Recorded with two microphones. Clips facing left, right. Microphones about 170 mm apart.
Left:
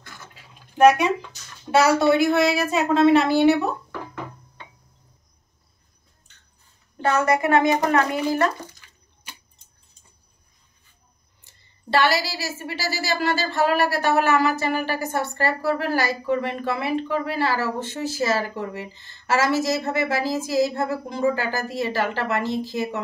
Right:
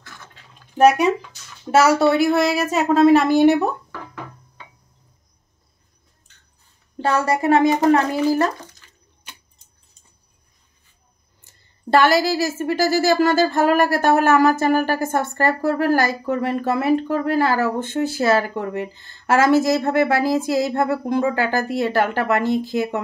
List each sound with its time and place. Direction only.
0.0 s bathtub: 5° left (ahead or behind)
2.0 s a child's voice: 35° right (ahead or behind); by 3.7 s 50° right (ahead or behind)
7.0 s a child's voice: 30° right (ahead or behind)
11.4 s speech: 50° right (ahead or behind)